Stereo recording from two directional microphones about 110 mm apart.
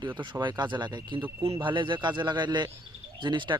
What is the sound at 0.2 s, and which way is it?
Speech, 45° right (ahead or behind).